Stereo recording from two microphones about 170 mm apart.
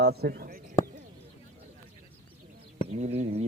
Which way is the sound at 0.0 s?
65° right (ahead or behind).